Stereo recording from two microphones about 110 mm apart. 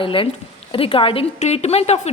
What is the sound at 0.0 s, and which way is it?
A woman's voice, 55° left (ahead or behind).